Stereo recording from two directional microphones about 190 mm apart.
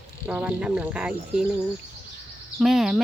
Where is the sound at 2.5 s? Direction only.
Centre (ahead or behind).